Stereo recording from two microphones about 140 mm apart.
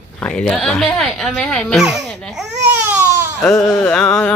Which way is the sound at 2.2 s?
5° right (ahead or behind).